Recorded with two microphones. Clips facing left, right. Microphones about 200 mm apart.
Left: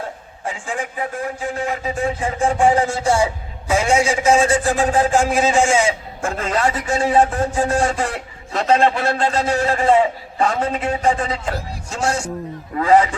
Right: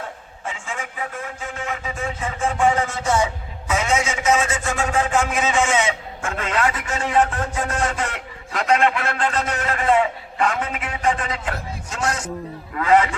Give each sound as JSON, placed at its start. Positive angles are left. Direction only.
{"t": 0.7, "sound": "a man's voice", "side_deg": 35}